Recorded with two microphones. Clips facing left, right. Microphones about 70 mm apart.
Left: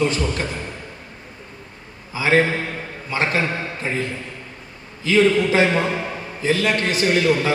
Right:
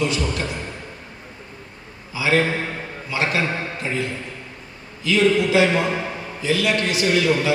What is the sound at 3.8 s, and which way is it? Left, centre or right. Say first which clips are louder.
A man's voice: left 1 dB; left.